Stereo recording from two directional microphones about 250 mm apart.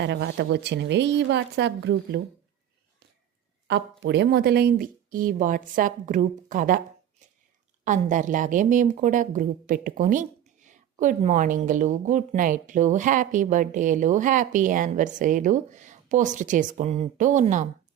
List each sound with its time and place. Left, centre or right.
0.0 s a woman's voice: right
3.7 s a woman's voice: right
7.9 s a woman's voice: right